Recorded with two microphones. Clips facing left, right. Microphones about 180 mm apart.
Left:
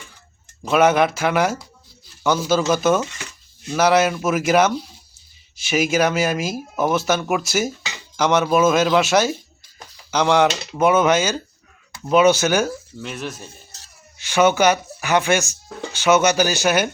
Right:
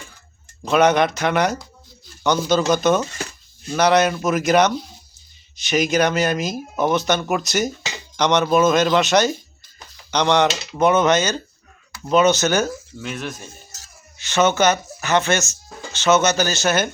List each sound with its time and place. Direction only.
0.6 s speech: 5° left (ahead or behind)
13.4 s music: 30° left (ahead or behind)
14.2 s speech: 10° left (ahead or behind)